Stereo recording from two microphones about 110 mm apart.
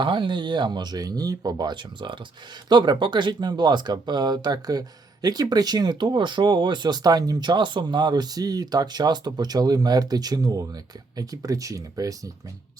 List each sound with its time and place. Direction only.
0.0 s speech: 45° right (ahead or behind)